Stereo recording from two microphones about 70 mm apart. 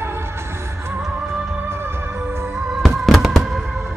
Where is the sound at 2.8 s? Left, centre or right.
Centre.